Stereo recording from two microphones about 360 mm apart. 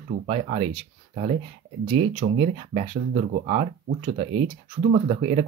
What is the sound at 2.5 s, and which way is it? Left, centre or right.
Speech, centre.